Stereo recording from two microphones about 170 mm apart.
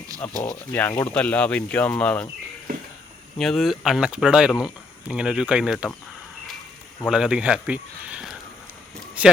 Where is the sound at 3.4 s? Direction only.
Centre (ahead or behind).